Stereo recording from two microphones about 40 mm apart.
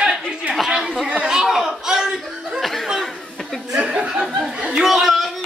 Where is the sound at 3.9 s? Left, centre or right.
Centre.